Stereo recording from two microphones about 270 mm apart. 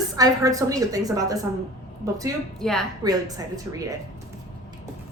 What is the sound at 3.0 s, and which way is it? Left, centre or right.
Speech, centre.